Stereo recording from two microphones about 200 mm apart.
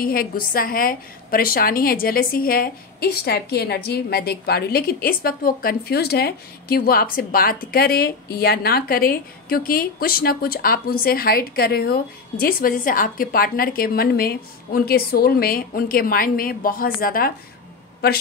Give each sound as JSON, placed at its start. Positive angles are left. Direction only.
{"t": 0.0, "sound": "a woman's voice", "side_deg": 45}